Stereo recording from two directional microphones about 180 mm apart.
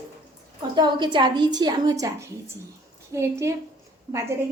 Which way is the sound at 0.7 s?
25° right (ahead or behind).